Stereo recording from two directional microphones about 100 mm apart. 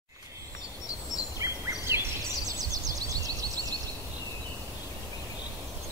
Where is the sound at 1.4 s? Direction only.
30° right (ahead or behind).